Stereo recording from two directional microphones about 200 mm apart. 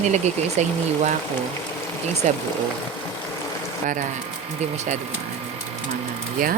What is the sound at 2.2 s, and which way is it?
Speech, 35° right (ahead or behind).